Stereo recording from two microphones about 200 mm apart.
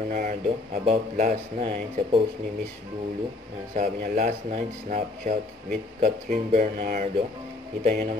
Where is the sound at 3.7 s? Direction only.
40° right (ahead or behind).